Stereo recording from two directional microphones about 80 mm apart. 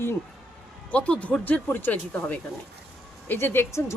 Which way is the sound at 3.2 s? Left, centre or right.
Left.